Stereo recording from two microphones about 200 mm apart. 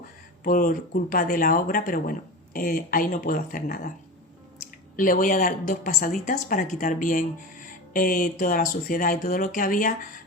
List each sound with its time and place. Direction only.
0.4 s speech: 45° left (ahead or behind)
4.9 s speech: 40° left (ahead or behind)